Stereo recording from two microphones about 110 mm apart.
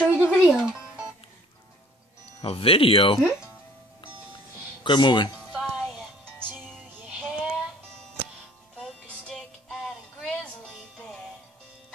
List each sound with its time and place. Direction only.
0.0 s music: 10° right (ahead or behind)
2.4 s speech: 60° left (ahead or behind)
4.8 s speech: 45° left (ahead or behind)
5.6 s music: centre (ahead or behind)
7.1 s music: 10° right (ahead or behind)
8.7 s music: 5° left (ahead or behind)